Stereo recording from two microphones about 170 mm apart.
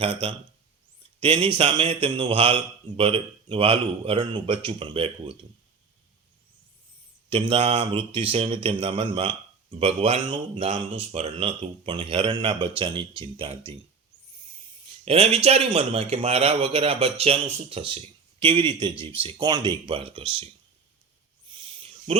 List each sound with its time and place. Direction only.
0.0 s speech: 35° right (ahead or behind)
7.3 s speech: 35° right (ahead or behind)
15.0 s speech: 35° right (ahead or behind)
21.5 s a sound: 30° right (ahead or behind)